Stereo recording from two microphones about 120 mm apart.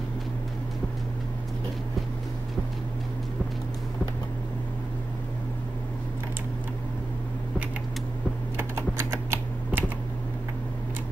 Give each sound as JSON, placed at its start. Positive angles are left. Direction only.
{"t": 8.5, "sound": "typing", "side_deg": -20}